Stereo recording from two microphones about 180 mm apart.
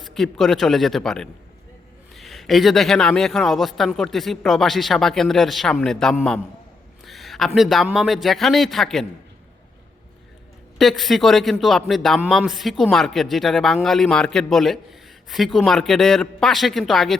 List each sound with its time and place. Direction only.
0.0 s speech: centre (ahead or behind)
7.0 s a sound: centre (ahead or behind)
7.9 s speech: centre (ahead or behind)
10.8 s speech: centre (ahead or behind)